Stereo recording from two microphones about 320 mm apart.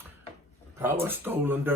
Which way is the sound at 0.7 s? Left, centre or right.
Centre.